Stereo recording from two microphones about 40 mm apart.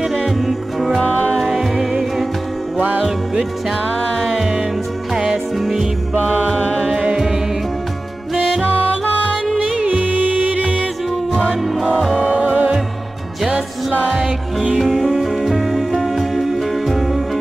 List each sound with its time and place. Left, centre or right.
0.5 s music: centre
5.1 s music: centre
6.9 s music: right
9.8 s music: right
12.2 s music: right
14.1 s music: centre